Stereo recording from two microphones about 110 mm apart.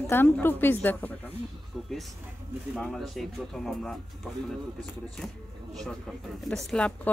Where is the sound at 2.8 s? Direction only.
5° left (ahead or behind).